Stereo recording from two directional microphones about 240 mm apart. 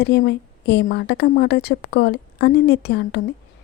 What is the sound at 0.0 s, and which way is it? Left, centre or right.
A woman's voice, left.